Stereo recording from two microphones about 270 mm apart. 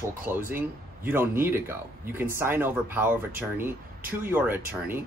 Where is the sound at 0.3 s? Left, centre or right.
Centre.